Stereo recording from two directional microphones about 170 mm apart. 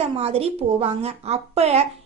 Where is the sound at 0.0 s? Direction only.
35° right (ahead or behind).